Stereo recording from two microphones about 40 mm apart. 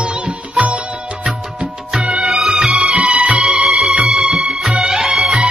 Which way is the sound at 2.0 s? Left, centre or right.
Right.